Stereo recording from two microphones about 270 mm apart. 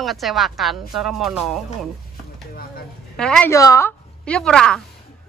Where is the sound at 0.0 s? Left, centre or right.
Centre.